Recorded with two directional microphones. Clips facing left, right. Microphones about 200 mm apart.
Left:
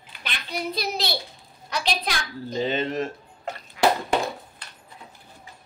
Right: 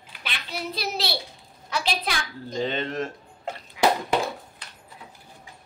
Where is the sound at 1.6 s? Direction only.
5° right (ahead or behind).